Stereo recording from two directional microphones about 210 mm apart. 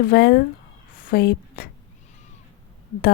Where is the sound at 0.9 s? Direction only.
45° left (ahead or behind).